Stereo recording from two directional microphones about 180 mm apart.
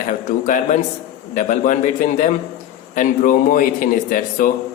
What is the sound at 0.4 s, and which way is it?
A man's voice, 45° left (ahead or behind).